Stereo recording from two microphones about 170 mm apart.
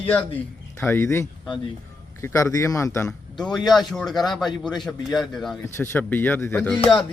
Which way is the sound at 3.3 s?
Centre (ahead or behind).